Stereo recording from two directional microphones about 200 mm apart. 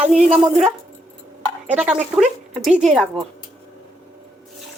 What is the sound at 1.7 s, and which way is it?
Speech, 5° right (ahead or behind).